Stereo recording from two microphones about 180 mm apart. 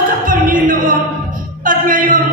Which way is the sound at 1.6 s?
50° right (ahead or behind).